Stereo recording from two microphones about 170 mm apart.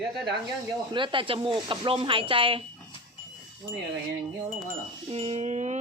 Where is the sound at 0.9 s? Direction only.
30° right (ahead or behind).